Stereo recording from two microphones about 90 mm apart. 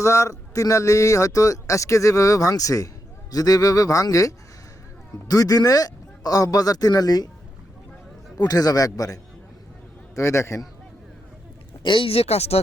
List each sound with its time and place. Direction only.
0.0 s a man's voice: 35° left (ahead or behind)
8.4 s a man's voice: 45° left (ahead or behind)
10.2 s a man's voice: 30° left (ahead or behind)
11.8 s speech: 65° left (ahead or behind)